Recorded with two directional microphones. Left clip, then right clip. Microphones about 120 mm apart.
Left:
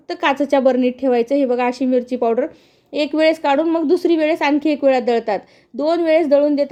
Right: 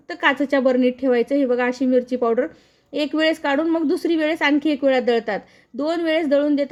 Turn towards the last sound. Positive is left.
turn(degrees=20)  # may be behind; listen again after turning